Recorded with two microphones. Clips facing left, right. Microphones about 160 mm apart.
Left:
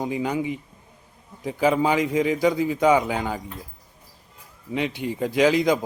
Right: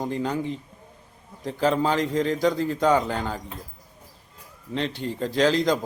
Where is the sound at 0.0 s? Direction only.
10° left (ahead or behind).